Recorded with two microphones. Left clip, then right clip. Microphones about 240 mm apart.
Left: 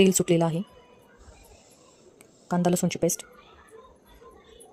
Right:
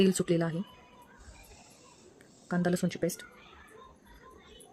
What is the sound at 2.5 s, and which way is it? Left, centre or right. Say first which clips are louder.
Speech: left 6 dB; centre.